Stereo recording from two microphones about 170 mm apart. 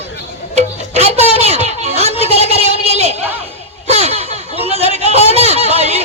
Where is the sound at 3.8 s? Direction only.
40° right (ahead or behind).